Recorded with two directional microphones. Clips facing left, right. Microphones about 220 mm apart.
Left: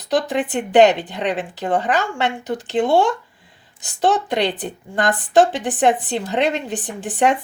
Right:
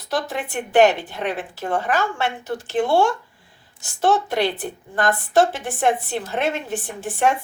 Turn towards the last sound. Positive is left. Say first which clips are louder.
# left 2 dB
turn(degrees=15)  # may be behind; listen again after turning